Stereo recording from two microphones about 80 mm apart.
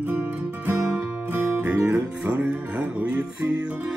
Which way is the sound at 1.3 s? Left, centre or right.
Right.